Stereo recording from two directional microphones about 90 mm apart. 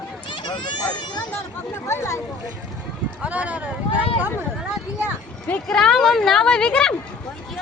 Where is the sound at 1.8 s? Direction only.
30° left (ahead or behind).